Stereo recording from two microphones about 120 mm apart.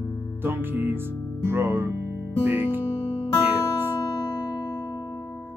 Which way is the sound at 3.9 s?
30° left (ahead or behind).